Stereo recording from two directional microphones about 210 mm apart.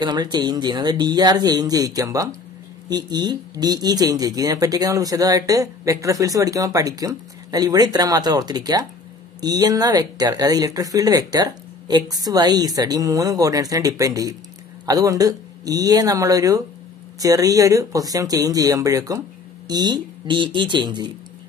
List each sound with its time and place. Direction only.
0.0 s speech: 20° right (ahead or behind)